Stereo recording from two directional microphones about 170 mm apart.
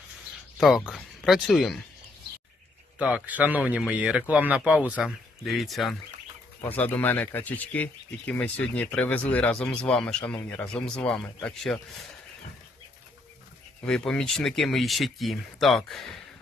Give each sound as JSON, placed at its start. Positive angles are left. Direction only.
{"t": 0.6, "sound": "speech", "side_deg": 0}
{"t": 3.0, "sound": "a man's voice", "side_deg": -10}
{"t": 13.8, "sound": "speech", "side_deg": 5}